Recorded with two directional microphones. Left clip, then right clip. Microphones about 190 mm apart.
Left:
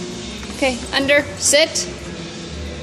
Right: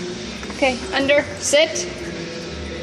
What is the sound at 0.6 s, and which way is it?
Speech, 20° left (ahead or behind).